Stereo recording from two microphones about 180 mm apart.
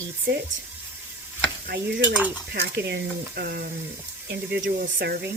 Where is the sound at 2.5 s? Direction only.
65° right (ahead or behind).